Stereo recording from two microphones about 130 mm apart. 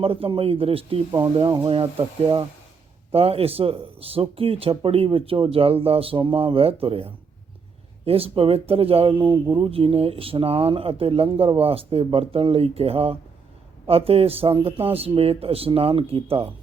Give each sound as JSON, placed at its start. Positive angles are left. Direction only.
{"t": 0.0, "sound": "speech", "side_deg": -45}